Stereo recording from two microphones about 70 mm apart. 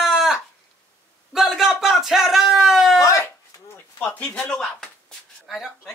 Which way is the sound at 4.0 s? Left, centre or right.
Centre.